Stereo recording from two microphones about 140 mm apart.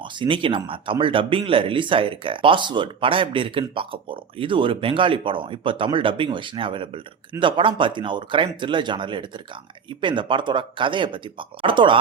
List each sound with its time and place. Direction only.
0.0 s speech: 35° right (ahead or behind)